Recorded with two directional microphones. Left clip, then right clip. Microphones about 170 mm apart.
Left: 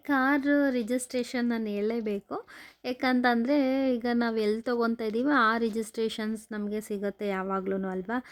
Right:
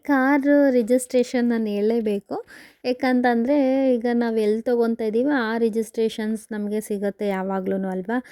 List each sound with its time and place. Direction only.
0.1 s a woman's voice: 30° right (ahead or behind)